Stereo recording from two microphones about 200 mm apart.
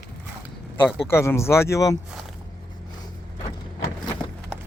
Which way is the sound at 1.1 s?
15° left (ahead or behind).